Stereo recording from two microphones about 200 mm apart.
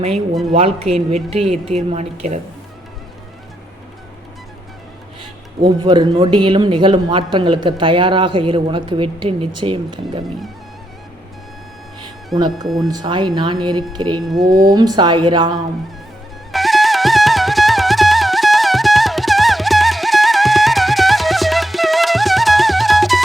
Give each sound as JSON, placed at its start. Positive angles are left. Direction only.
{"t": 0.5, "sound": "a woman's voice", "side_deg": -30}
{"t": 5.6, "sound": "speech", "side_deg": -20}
{"t": 12.3, "sound": "speech", "side_deg": 0}
{"t": 12.9, "sound": "speech", "side_deg": -20}
{"t": 14.2, "sound": "speech", "side_deg": 0}
{"t": 14.6, "sound": "speech", "side_deg": -20}
{"t": 16.5, "sound": "music", "side_deg": 0}